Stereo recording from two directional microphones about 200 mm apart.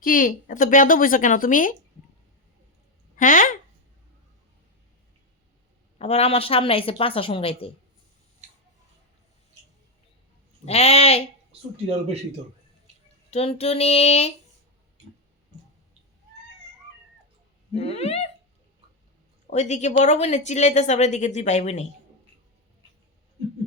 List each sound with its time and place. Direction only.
0.0 s a woman's voice: 45° left (ahead or behind)
3.2 s a woman's voice: 40° left (ahead or behind)
6.0 s a woman's voice: 30° left (ahead or behind)
10.7 s a woman's voice: 30° left (ahead or behind)
13.3 s a woman's voice: 30° left (ahead or behind)
17.7 s a woman's voice: 30° left (ahead or behind)
19.5 s a woman's voice: 35° left (ahead or behind)